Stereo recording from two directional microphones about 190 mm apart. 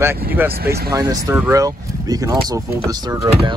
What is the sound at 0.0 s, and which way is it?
Speech, 10° right (ahead or behind).